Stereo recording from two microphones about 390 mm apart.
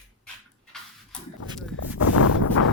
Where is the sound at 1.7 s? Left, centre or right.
Left.